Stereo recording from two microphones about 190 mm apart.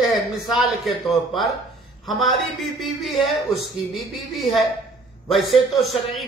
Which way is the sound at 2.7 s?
Centre (ahead or behind).